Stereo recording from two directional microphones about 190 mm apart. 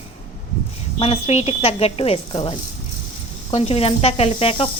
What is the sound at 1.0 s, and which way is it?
A woman's voice, 30° left (ahead or behind).